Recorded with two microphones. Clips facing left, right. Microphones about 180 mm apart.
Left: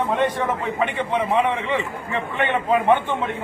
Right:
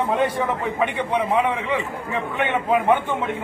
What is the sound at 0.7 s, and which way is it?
A man's voice, 10° right (ahead or behind).